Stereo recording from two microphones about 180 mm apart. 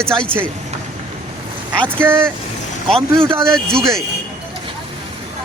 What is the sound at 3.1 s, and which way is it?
Speech, 30° right (ahead or behind).